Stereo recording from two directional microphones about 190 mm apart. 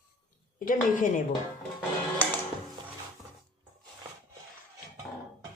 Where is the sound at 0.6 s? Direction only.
45° left (ahead or behind).